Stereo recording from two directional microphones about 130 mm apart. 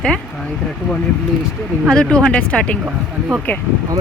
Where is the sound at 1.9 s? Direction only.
5° left (ahead or behind).